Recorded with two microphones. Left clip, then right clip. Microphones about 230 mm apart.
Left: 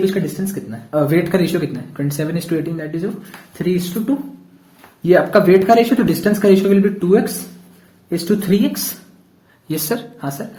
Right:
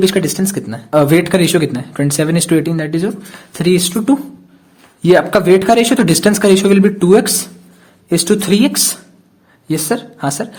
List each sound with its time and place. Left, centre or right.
0.0 s speech: right
9.6 s speech: right